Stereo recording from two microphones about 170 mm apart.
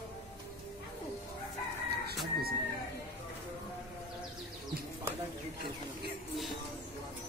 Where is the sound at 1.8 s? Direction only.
70° right (ahead or behind).